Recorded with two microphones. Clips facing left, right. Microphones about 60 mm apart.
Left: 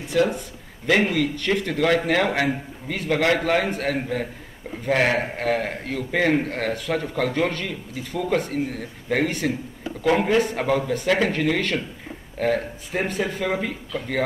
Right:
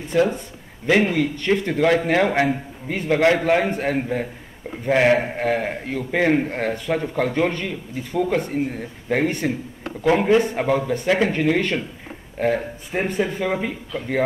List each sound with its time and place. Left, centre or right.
0.1 s speech: centre
0.8 s a man's voice: centre